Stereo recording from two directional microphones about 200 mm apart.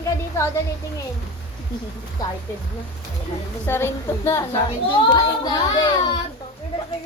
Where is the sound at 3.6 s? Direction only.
10° left (ahead or behind).